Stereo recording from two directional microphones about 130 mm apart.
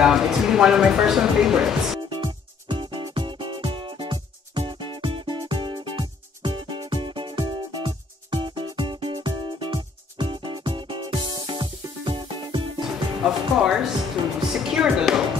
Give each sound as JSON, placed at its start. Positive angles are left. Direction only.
{"t": 0.0, "sound": "speech", "side_deg": -5}
{"t": 2.0, "sound": "music", "side_deg": -40}
{"t": 13.2, "sound": "music", "side_deg": -5}